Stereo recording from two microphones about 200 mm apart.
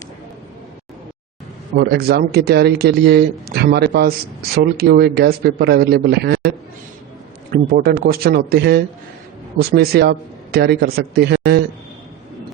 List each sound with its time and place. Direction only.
1.7 s speech: 50° right (ahead or behind)
7.5 s speech: 50° right (ahead or behind)